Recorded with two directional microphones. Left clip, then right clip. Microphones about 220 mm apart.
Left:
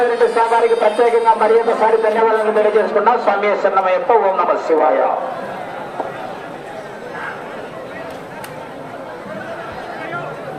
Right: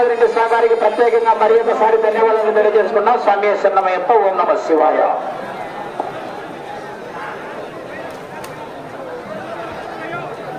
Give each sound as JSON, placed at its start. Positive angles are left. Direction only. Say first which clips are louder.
{"t": 0.3, "sound": "a man's voice", "louder": "even", "side_deg": -50}